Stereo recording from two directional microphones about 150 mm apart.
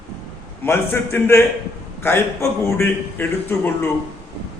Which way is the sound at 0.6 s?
15° left (ahead or behind).